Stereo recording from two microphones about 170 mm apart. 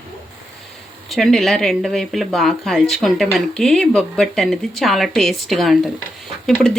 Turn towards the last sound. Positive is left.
turn(degrees=0)  # may be behind; listen again after turning